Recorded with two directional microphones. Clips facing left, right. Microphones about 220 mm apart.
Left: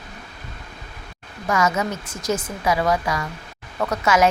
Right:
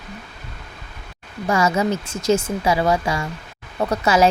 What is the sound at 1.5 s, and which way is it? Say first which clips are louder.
Speech: right 3 dB; 30° right (ahead or behind).